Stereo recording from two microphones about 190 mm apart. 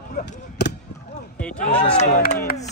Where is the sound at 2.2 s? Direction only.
55° left (ahead or behind).